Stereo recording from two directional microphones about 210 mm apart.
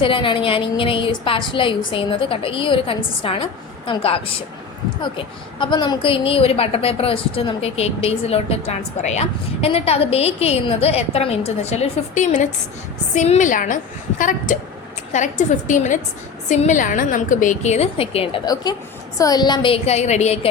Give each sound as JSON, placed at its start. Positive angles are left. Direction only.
{"t": 0.0, "sound": "a woman's voice", "side_deg": 25}